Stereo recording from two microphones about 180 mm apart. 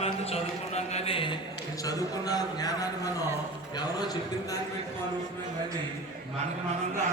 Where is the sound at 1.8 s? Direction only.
20° left (ahead or behind).